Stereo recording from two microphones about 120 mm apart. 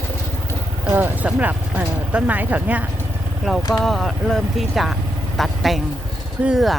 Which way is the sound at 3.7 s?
Centre (ahead or behind).